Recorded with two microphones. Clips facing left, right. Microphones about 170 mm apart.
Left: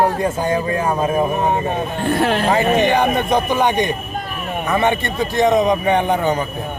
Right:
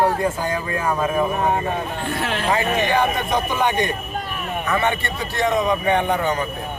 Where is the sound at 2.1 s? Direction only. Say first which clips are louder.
Left 8 dB; 40° left (ahead or behind).